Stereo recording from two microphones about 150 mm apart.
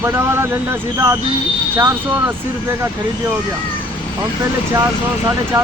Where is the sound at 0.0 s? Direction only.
15° right (ahead or behind).